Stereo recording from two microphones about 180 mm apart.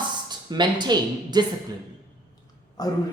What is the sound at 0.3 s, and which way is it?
Speech, 25° right (ahead or behind).